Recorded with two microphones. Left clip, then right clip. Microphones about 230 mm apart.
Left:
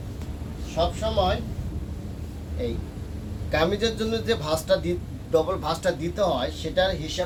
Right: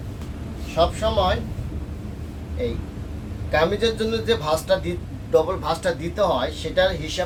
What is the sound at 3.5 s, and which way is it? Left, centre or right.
Speech, centre.